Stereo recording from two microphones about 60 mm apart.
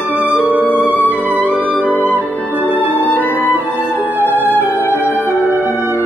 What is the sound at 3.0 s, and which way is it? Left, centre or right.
Music, left.